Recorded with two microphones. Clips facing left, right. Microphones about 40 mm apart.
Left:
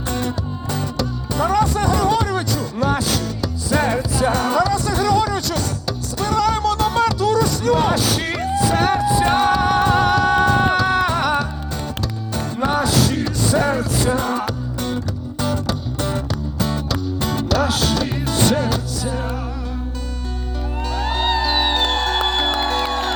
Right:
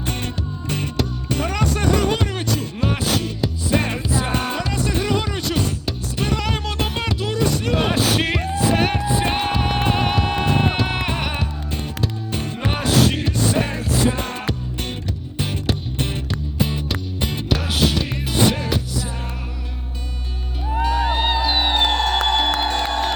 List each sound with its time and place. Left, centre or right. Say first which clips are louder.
0.1 s music: left 5 dB; right
16.6 s music: left 1 dB; right
20.7 s music: right 4 dB; centre